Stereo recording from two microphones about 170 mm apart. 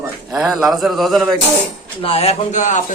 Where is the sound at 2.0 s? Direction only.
35° left (ahead or behind).